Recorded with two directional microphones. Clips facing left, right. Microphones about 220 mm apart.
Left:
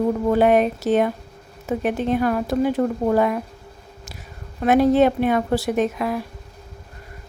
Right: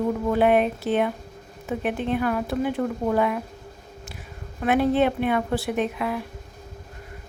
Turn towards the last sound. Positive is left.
turn(degrees=40)  # may be behind; listen again after turning